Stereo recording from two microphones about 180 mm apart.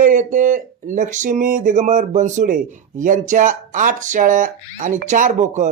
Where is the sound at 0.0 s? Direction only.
45° right (ahead or behind).